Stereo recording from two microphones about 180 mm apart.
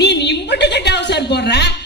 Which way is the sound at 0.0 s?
70° left (ahead or behind).